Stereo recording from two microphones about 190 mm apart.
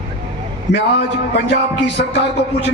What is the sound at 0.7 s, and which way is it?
A man's voice, 70° left (ahead or behind).